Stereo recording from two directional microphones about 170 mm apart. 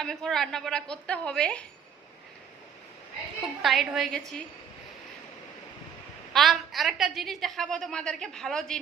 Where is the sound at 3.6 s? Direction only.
Centre (ahead or behind).